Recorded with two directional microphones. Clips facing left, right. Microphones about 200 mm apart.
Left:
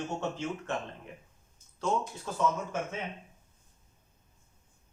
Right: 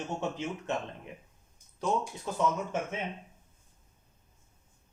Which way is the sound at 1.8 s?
15° right (ahead or behind).